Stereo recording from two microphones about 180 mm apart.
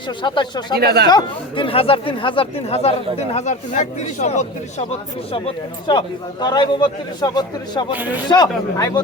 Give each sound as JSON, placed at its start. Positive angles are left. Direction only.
{"t": 0.2, "sound": "a man's voice", "side_deg": 25}
{"t": 0.8, "sound": "speech", "side_deg": -60}
{"t": 1.0, "sound": "a man's voice", "side_deg": 25}
{"t": 5.9, "sound": "a man's voice", "side_deg": 25}
{"t": 7.9, "sound": "speech", "side_deg": -10}
{"t": 8.3, "sound": "a man's voice", "side_deg": 20}